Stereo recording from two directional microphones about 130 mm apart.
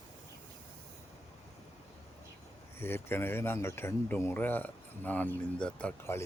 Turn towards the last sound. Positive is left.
turn(degrees=10)  # may be behind; listen again after turning